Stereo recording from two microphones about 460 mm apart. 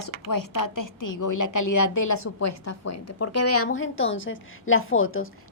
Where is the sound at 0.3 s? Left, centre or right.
Left.